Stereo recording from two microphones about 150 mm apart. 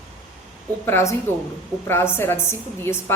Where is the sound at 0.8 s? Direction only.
20° left (ahead or behind).